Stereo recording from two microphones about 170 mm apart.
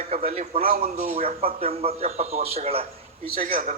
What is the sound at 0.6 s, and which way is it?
Speech, 55° right (ahead or behind).